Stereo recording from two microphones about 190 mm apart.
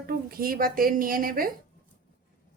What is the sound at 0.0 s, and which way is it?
A woman's voice, 50° right (ahead or behind).